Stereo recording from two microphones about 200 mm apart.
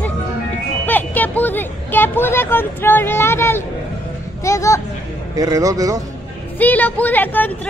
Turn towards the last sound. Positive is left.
turn(degrees=10)  # may be behind; listen again after turning